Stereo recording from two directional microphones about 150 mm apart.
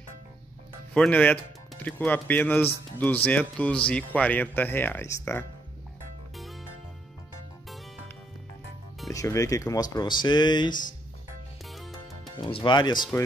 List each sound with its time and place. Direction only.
0.9 s speech: 10° left (ahead or behind)
9.1 s speech: 20° left (ahead or behind)
12.4 s speech: 35° left (ahead or behind)